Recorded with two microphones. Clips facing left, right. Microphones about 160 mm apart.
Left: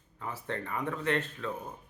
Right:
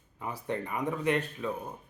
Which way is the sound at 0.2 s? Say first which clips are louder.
Right 3 dB; 15° right (ahead or behind).